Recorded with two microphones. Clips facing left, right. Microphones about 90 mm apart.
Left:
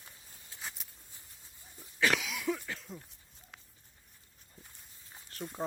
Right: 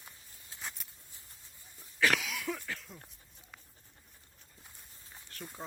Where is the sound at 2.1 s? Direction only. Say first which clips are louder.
Even; 15° left (ahead or behind).